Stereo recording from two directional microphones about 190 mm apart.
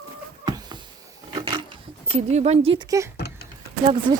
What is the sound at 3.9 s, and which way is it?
Speech, 25° right (ahead or behind).